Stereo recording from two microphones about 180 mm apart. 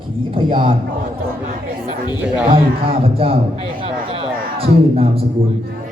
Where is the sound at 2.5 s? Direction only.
30° right (ahead or behind).